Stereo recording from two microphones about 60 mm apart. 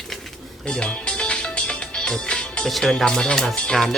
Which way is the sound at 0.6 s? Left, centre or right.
Centre.